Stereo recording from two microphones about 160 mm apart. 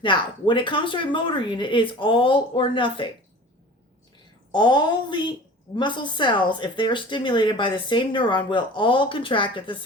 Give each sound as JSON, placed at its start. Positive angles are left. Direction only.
{"t": 0.0, "sound": "speech", "side_deg": 30}
{"t": 4.5, "sound": "speech", "side_deg": 30}